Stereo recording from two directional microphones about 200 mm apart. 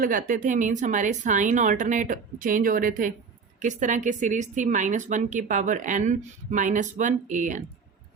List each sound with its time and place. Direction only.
0.0 s speech: 45° right (ahead or behind)